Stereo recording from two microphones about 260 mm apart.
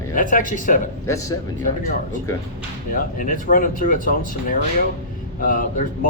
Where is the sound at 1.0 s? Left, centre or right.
Centre.